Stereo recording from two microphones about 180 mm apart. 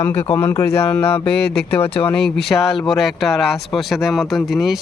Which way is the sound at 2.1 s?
Centre (ahead or behind).